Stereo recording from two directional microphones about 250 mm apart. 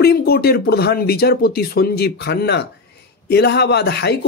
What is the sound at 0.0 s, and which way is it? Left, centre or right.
Speech, left.